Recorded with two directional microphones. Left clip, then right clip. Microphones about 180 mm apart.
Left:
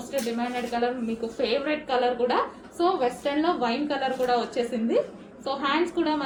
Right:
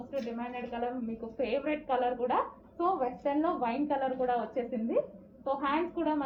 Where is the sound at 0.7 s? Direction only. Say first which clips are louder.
Left 8 dB; 25° left (ahead or behind).